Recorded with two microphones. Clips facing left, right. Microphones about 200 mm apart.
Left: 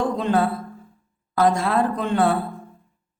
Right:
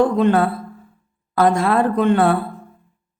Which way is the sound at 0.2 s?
60° right (ahead or behind).